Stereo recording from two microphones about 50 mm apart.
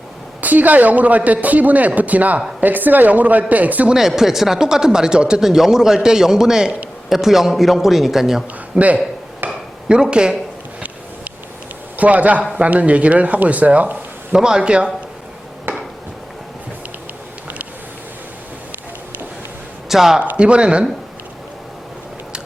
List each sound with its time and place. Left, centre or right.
0.4 s a woman's voice: right
3.8 s a man's voice: centre
8.7 s a man's voice: right
9.4 s a sound: right
9.9 s speech: centre
11.9 s speech: right
14.3 s speech: centre
15.7 s a sound: right
19.9 s speech: centre
20.3 s speech: right